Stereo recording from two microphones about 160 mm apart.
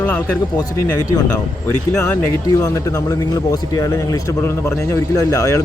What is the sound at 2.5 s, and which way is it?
Speech, 20° left (ahead or behind).